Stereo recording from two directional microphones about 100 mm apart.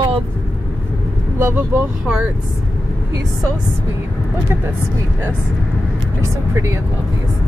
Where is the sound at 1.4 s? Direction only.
25° right (ahead or behind).